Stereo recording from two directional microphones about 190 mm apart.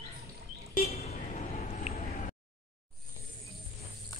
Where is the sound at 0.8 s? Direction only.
35° left (ahead or behind).